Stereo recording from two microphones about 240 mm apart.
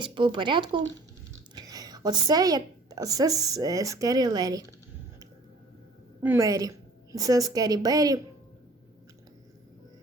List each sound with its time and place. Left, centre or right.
0.0 s a woman's voice: right
6.2 s a woman's voice: centre